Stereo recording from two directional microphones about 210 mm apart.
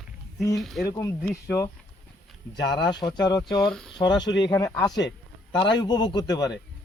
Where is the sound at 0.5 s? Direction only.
Centre (ahead or behind).